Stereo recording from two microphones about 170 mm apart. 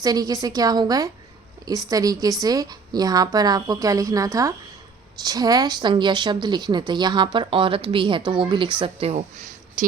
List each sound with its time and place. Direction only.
0.0 s a woman's voice: 20° right (ahead or behind)
9.8 s speech: 50° right (ahead or behind)